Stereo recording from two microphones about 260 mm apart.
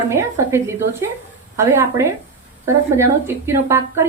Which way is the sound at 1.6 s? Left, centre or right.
Centre.